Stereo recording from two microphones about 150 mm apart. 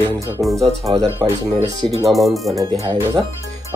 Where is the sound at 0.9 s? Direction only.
40° right (ahead or behind).